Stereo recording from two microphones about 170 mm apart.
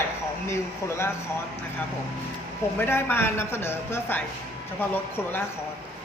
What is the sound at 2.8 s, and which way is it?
A woman's voice, 15° left (ahead or behind).